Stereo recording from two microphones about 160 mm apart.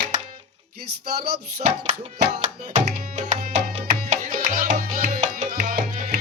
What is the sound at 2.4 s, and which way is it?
Music, 50° right (ahead or behind).